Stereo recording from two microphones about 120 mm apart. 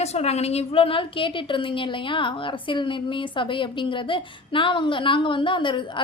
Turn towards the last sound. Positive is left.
turn(degrees=45)  # may be behind; listen again after turning